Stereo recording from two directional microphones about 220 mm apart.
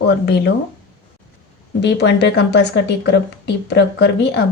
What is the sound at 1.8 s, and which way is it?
Speech, 50° left (ahead or behind).